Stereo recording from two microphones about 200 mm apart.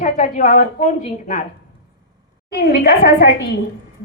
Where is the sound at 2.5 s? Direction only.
50° left (ahead or behind).